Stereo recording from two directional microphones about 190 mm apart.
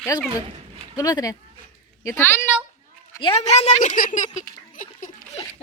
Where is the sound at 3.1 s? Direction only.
30° left (ahead or behind).